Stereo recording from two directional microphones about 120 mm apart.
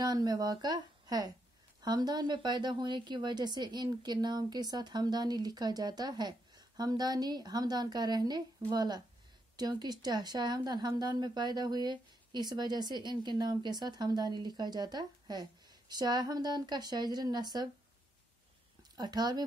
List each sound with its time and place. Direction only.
0.0 s a woman's voice: 35° right (ahead or behind)
18.9 s a woman's voice: 35° right (ahead or behind)